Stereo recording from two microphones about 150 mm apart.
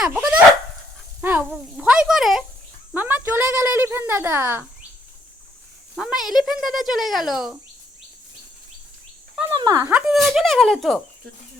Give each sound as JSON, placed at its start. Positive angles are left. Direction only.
{"t": 0.0, "sound": "a woman's voice", "side_deg": -5}
{"t": 6.0, "sound": "speech", "side_deg": -5}
{"t": 9.6, "sound": "speech", "side_deg": -25}
{"t": 9.9, "sound": "speech", "side_deg": 0}